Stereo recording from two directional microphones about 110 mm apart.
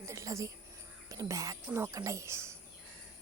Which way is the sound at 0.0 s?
30° right (ahead or behind).